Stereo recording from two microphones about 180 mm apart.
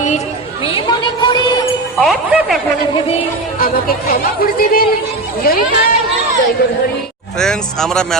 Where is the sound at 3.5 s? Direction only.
55° left (ahead or behind).